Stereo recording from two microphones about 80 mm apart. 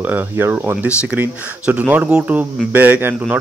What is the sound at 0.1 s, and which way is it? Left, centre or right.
Speech, right.